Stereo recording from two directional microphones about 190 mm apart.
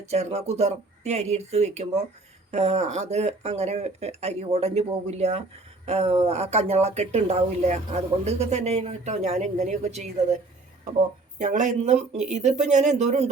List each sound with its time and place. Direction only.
0.0 s speech: 35° right (ahead or behind)
11.3 s speech: 40° right (ahead or behind)